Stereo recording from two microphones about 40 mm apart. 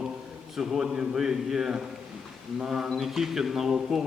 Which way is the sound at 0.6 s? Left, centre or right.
Centre.